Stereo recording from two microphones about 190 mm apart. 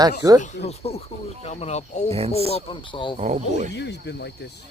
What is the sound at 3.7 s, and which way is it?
Speech, 65° left (ahead or behind).